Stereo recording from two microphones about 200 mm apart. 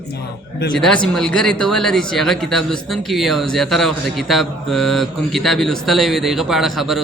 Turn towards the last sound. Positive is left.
turn(degrees=0)  # may be behind; listen again after turning